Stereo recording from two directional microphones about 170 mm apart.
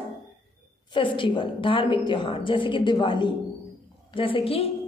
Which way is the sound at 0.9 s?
30° left (ahead or behind).